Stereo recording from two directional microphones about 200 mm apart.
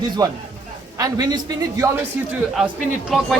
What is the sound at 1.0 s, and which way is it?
Speech, 20° right (ahead or behind).